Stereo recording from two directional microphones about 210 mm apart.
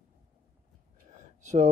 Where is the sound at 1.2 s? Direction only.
35° right (ahead or behind).